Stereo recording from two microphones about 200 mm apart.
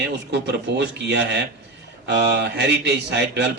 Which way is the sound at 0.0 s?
60° right (ahead or behind).